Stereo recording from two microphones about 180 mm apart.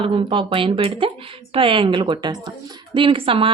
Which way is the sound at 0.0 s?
30° right (ahead or behind).